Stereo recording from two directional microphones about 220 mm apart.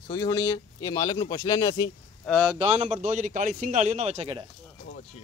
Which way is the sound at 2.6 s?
30° right (ahead or behind).